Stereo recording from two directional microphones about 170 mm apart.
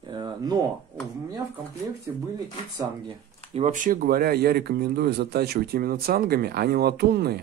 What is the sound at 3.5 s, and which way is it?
Speech, 45° right (ahead or behind).